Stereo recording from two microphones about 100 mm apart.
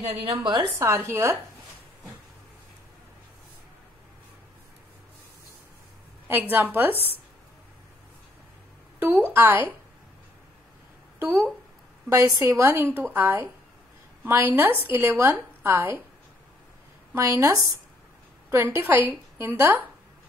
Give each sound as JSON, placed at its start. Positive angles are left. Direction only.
{"t": 0.4, "sound": "a woman's voice", "side_deg": -45}
{"t": 0.7, "sound": "a woman's voice", "side_deg": -30}
{"t": 6.5, "sound": "a woman's voice", "side_deg": -20}
{"t": 9.0, "sound": "a woman's voice", "side_deg": -20}
{"t": 11.1, "sound": "a woman's voice", "side_deg": -25}
{"t": 17.1, "sound": "a woman's voice", "side_deg": -30}